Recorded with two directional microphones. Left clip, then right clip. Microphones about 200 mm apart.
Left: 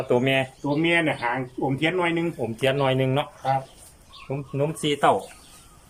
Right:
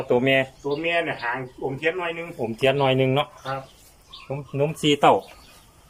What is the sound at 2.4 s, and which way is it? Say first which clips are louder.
Speech: right 4 dB; centre (ahead or behind).